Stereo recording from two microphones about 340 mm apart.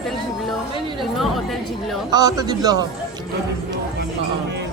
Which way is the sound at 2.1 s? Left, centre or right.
Centre.